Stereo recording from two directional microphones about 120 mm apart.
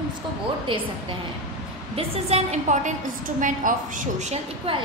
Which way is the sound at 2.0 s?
60° right (ahead or behind).